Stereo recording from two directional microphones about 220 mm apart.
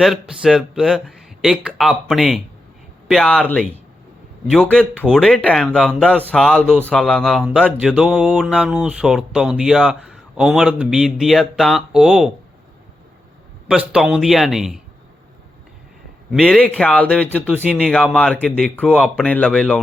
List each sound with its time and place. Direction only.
0.0 s speech: centre (ahead or behind)
13.7 s speech: 5° right (ahead or behind)
16.3 s speech: 5° left (ahead or behind)